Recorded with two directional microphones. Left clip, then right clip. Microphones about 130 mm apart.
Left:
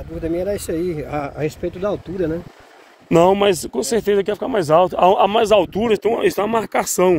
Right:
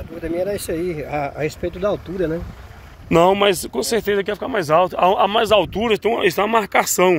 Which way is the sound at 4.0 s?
70° left (ahead or behind).